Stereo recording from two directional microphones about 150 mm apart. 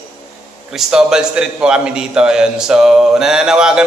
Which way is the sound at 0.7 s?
5° right (ahead or behind).